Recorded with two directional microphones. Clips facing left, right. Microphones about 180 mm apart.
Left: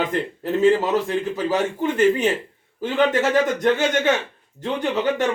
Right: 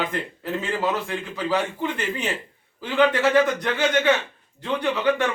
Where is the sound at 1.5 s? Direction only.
45° left (ahead or behind).